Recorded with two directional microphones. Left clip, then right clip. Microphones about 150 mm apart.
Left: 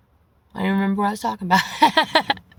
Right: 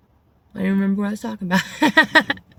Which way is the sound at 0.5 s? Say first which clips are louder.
Left 1 dB; 40° left (ahead or behind).